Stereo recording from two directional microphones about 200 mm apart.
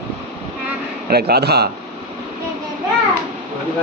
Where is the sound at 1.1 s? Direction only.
50° right (ahead or behind).